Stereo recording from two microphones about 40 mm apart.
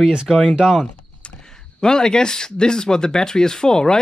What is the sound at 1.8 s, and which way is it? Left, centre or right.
Speech, centre.